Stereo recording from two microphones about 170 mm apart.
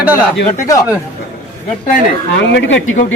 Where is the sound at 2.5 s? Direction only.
90° left.